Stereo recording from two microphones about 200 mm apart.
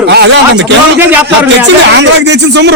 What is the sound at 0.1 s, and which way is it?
Speech, 60° right (ahead or behind).